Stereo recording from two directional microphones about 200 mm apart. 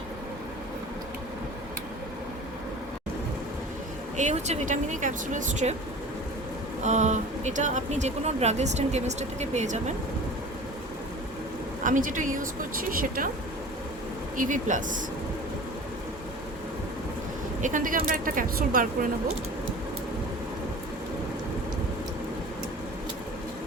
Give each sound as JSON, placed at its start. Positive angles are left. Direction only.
{"t": 4.2, "sound": "speech", "side_deg": -35}
{"t": 6.8, "sound": "speech", "side_deg": -35}
{"t": 11.8, "sound": "speech", "side_deg": -40}
{"t": 14.3, "sound": "speech", "side_deg": -40}
{"t": 17.6, "sound": "speech", "side_deg": -40}